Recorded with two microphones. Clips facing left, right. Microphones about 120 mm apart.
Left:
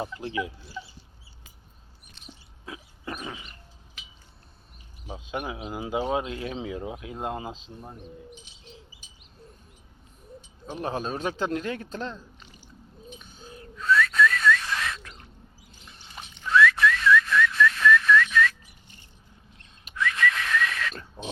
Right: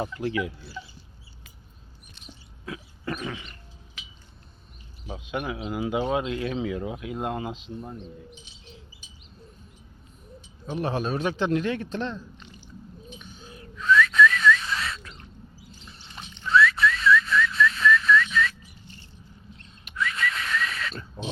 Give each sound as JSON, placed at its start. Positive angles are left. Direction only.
{"t": 0.0, "sound": "speech", "side_deg": 25}
{"t": 2.6, "sound": "a sound", "side_deg": 20}
{"t": 5.0, "sound": "speech", "side_deg": 25}
{"t": 7.8, "sound": "speech", "side_deg": 10}
{"t": 10.8, "sound": "a man's voice", "side_deg": 30}
{"t": 12.1, "sound": "rowboat", "side_deg": 5}
{"t": 13.1, "sound": "whistling", "side_deg": 40}
{"t": 16.1, "sound": "a sound", "side_deg": 10}
{"t": 16.5, "sound": "whistling", "side_deg": 60}
{"t": 20.0, "sound": "whistling", "side_deg": 65}